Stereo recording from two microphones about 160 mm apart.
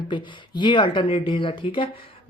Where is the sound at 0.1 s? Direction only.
30° left (ahead or behind).